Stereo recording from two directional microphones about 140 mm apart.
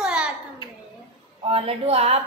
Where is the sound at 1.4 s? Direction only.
40° right (ahead or behind).